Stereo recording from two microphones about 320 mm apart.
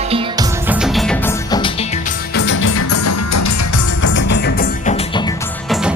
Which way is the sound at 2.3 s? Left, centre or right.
Left.